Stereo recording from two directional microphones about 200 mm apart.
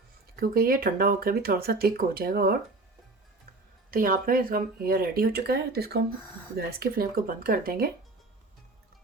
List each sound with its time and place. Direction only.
0.3 s speech: 50° right (ahead or behind)
3.9 s speech: 45° right (ahead or behind)